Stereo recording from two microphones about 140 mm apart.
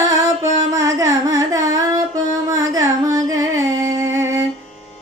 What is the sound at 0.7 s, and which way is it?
Carnatic music, 25° right (ahead or behind).